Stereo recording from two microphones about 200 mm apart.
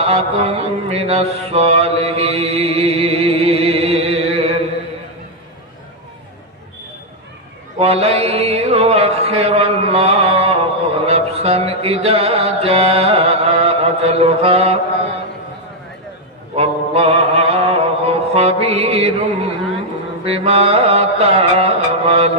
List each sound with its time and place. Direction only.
0.0 s mantra: 30° right (ahead or behind)
7.8 s mantra: 30° right (ahead or behind)
16.6 s mantra: 30° right (ahead or behind)
20.2 s mantra: 30° right (ahead or behind)